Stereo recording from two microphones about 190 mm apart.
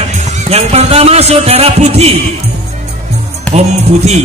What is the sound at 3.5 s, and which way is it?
Speech, 35° right (ahead or behind).